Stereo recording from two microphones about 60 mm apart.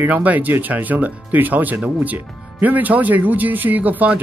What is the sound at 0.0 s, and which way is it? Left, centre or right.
Speech, right.